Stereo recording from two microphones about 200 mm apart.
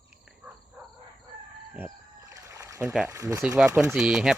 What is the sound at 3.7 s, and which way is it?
Speech, 5° right (ahead or behind).